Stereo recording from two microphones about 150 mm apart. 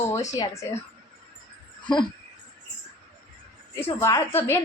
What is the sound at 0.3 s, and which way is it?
Speech, 20° left (ahead or behind).